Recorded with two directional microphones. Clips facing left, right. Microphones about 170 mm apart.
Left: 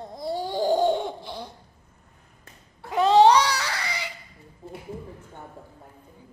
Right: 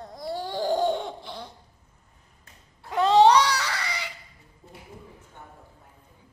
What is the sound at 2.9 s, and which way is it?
Cat, 5° left (ahead or behind).